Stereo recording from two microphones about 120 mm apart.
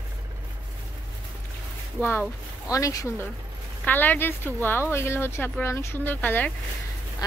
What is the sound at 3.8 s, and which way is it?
Speech, 15° left (ahead or behind).